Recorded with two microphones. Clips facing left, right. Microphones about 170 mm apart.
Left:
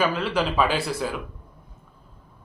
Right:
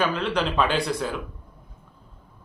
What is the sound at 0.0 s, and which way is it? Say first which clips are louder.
Speech: left 1 dB; 5° left (ahead or behind).